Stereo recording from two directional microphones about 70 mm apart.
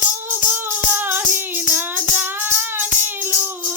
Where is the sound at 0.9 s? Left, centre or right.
Right.